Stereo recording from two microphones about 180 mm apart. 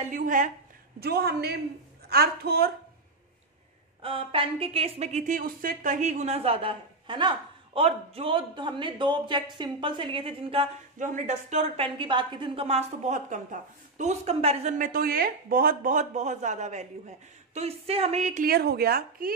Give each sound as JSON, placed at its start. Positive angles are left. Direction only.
{"t": 0.0, "sound": "a woman's voice", "side_deg": -45}
{"t": 0.9, "sound": "a woman's voice", "side_deg": -60}
{"t": 4.0, "sound": "a woman's voice", "side_deg": -30}
{"t": 11.0, "sound": "a woman's voice", "side_deg": -45}